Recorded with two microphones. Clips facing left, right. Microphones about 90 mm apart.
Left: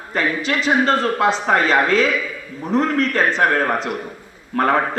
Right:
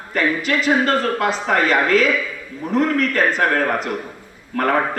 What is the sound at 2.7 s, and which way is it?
Speech, 30° left (ahead or behind).